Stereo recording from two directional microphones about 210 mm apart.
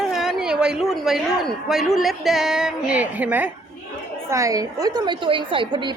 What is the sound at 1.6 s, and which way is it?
A woman's voice, centre (ahead or behind).